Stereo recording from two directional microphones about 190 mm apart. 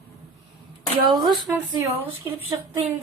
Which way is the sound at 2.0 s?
10° right (ahead or behind).